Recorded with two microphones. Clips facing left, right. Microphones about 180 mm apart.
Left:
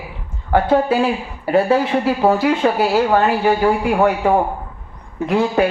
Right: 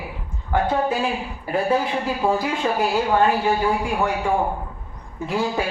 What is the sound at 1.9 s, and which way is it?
Speech, 60° left (ahead or behind).